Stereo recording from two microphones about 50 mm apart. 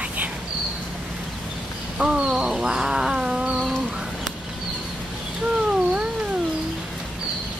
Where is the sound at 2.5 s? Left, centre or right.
Centre.